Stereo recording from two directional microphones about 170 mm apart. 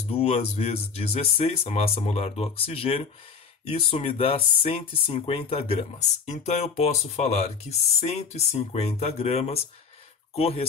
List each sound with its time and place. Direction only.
0.1 s speech: 40° left (ahead or behind)